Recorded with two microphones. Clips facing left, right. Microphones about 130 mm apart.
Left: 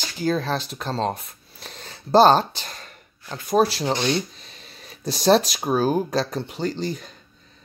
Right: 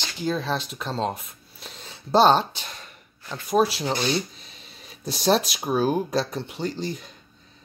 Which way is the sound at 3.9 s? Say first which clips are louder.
Left 2 dB; 5° right (ahead or behind).